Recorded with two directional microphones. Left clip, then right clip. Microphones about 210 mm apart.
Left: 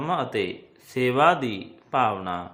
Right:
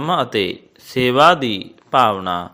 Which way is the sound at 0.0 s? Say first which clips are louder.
Right 7 dB; 25° right (ahead or behind).